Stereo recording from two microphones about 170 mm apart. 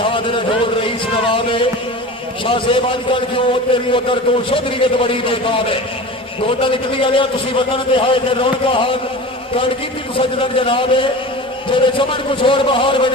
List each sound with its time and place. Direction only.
1.1 s music: 30° left (ahead or behind)
2.4 s a man's voice: 30° left (ahead or behind)
10.2 s a man's voice: 30° left (ahead or behind)